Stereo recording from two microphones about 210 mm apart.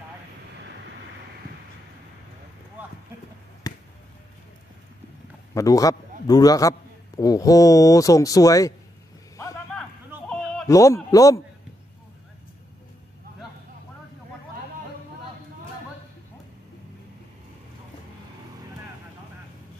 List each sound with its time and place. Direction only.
3.6 s basketball bounce: 15° left (ahead or behind)
5.5 s a man's voice: 15° left (ahead or behind)
9.8 s a sound: 5° left (ahead or behind)
10.7 s speech: 15° left (ahead or behind)